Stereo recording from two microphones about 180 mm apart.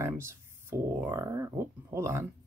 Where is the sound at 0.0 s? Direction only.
15° right (ahead or behind).